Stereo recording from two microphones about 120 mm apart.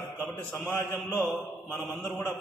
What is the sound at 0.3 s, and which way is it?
A man's voice, 5° left (ahead or behind).